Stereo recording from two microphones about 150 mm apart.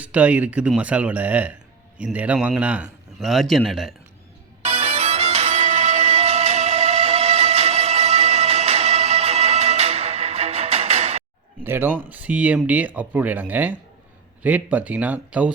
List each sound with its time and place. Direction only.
0.0 s a man's voice: 10° right (ahead or behind)
4.6 s music: 40° right (ahead or behind)
11.6 s speech: 15° right (ahead or behind)